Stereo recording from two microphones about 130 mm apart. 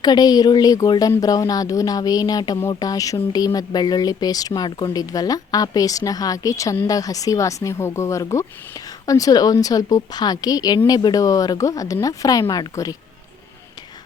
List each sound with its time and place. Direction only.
0.0 s speech: 30° left (ahead or behind)